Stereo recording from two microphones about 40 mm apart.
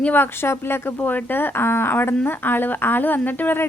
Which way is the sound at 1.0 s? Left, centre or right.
Left.